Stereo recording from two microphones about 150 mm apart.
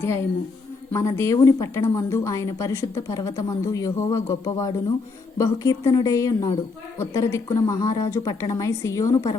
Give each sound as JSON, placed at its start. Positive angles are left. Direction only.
{"t": 0.0, "sound": "a woman's voice", "side_deg": 15}